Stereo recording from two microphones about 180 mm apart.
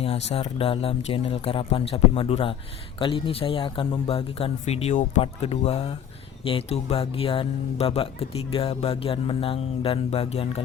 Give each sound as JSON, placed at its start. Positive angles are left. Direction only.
{"t": 0.0, "sound": "speech", "side_deg": 30}